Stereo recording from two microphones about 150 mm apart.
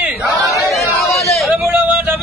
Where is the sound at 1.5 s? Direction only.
15° right (ahead or behind).